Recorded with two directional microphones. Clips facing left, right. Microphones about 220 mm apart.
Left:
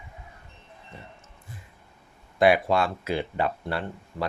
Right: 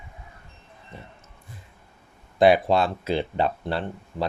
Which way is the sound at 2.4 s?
35° right (ahead or behind).